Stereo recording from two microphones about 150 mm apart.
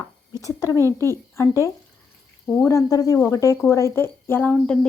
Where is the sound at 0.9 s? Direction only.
15° left (ahead or behind).